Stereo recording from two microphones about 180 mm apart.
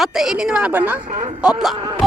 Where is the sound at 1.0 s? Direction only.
40° right (ahead or behind).